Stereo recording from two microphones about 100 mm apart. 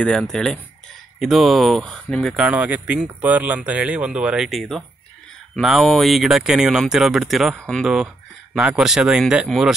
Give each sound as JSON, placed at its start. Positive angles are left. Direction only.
{"t": 0.0, "sound": "speech", "side_deg": 10}
{"t": 2.5, "sound": "speech", "side_deg": -15}
{"t": 8.5, "sound": "speech", "side_deg": -10}